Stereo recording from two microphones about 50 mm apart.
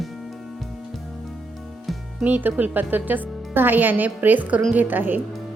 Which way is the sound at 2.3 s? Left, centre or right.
Right.